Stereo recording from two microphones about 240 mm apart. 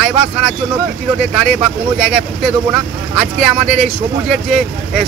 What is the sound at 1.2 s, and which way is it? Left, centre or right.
Speech, centre.